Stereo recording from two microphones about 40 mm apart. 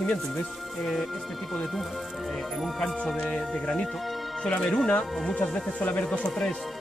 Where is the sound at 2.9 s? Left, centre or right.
Left.